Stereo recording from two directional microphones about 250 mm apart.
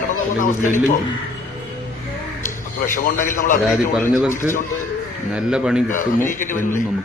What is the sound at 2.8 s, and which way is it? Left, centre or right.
Speech, left.